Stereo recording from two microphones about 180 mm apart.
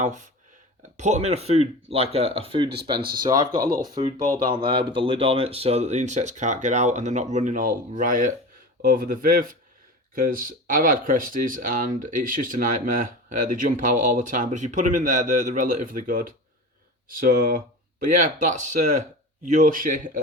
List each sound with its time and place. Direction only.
0.0 s speech: 40° right (ahead or behind)
3.0 s speech: 55° right (ahead or behind)
3.2 s speech: 20° right (ahead or behind)
3.5 s speech: 50° right (ahead or behind)
4.4 s speech: 25° right (ahead or behind); by 20.0 s 50° right (ahead or behind)